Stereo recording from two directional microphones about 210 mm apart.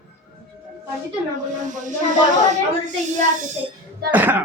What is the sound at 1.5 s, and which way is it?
Speech, 35° right (ahead or behind).